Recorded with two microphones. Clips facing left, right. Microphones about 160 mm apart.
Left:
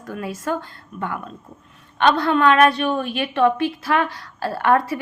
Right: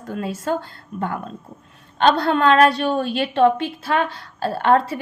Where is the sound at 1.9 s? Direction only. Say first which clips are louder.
Even; 35° right (ahead or behind).